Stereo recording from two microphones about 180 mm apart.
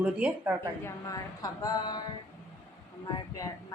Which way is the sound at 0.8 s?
20° left (ahead or behind).